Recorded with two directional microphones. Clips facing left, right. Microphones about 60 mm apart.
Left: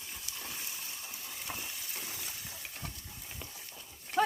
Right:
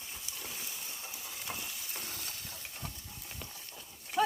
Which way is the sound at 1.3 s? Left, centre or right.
Centre.